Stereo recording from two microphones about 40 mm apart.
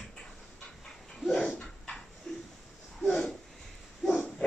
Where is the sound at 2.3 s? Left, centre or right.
Centre.